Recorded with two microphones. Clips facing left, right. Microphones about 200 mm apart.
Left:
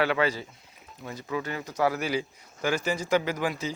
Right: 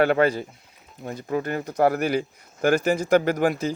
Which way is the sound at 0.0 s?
50° right (ahead or behind).